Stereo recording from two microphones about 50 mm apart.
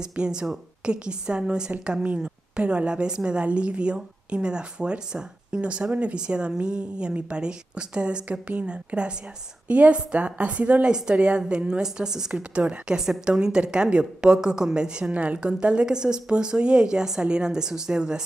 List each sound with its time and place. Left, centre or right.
0.1 s a woman's voice: centre
12.4 s a woman's voice: right